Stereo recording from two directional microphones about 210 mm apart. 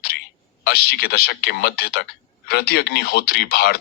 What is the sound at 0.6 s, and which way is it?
Speech, 50° left (ahead or behind).